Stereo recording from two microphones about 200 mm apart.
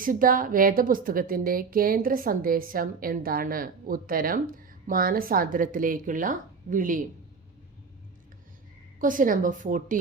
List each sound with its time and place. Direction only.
0.0 s a woman's voice: 45° right (ahead or behind)
9.0 s a woman's voice: 40° right (ahead or behind)